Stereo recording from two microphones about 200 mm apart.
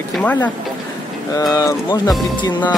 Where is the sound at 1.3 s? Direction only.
20° left (ahead or behind).